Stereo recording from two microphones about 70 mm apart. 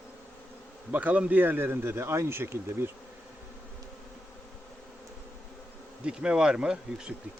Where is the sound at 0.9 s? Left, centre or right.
Right.